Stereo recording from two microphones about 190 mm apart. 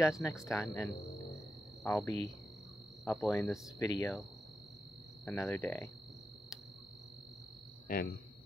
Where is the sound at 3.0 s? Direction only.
Centre (ahead or behind).